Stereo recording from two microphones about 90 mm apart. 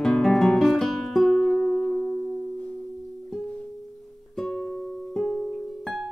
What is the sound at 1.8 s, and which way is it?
Music, 15° left (ahead or behind).